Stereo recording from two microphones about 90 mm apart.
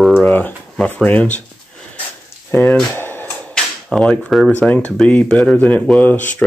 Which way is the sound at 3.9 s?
10° left (ahead or behind).